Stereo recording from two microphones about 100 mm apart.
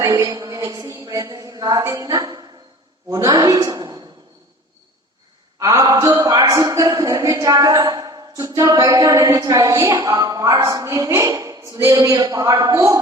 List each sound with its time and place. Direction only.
0.0 s a woman's voice: 35° right (ahead or behind)
5.5 s a woman's voice: 35° right (ahead or behind)